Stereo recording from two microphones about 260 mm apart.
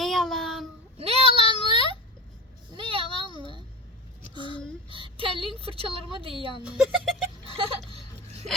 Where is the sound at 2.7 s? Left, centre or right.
Centre.